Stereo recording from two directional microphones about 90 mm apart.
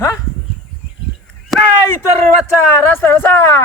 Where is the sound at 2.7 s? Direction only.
25° left (ahead or behind).